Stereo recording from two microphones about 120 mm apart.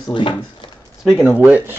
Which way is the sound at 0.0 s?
40° left (ahead or behind).